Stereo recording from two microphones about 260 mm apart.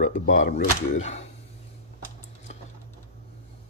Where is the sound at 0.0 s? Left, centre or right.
Left.